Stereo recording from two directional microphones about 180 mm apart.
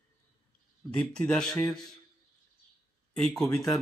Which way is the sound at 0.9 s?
5° left (ahead or behind).